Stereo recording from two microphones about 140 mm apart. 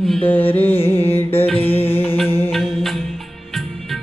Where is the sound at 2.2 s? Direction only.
15° left (ahead or behind).